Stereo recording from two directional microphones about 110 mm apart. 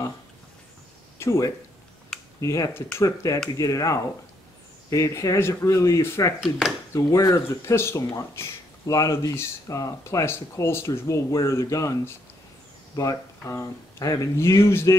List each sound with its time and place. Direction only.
1.1 s a sound: 25° left (ahead or behind)
2.1 s computer keyboard: 5° left (ahead or behind)
2.4 s speech: 30° left (ahead or behind)